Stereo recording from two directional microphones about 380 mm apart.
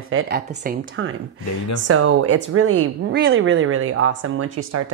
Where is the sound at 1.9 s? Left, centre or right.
Right.